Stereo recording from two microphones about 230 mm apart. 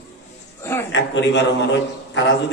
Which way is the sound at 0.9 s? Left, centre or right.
Left.